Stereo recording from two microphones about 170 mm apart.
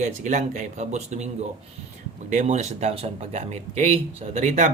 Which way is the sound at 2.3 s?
45° right (ahead or behind).